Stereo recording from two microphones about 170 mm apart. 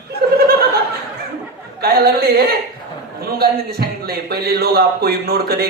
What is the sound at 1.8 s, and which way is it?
A man's voice, 65° right (ahead or behind).